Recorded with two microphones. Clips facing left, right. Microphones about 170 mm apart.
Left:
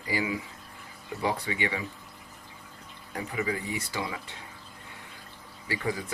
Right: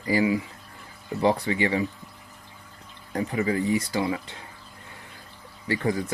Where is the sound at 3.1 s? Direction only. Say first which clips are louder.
Right 6 dB; 40° right (ahead or behind).